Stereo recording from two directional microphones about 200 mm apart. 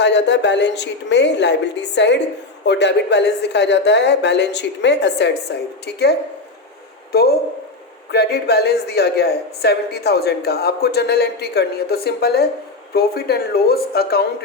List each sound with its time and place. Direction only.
0.0 s a woman's voice: 60° left (ahead or behind)